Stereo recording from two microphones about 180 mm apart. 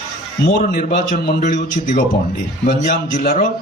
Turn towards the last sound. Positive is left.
turn(degrees=50)  # may be behind; listen again after turning